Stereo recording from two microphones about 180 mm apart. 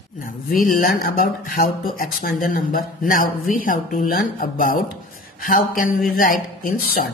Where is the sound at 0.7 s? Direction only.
55° left (ahead or behind).